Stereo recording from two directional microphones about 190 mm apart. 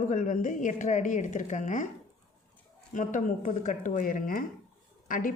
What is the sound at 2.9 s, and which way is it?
Speech, 40° left (ahead or behind).